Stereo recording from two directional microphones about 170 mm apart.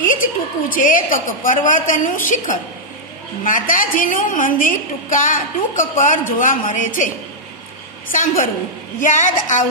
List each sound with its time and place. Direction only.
0.7 s a woman's voice: 50° left (ahead or behind)
8.1 s a woman's voice: 50° left (ahead or behind)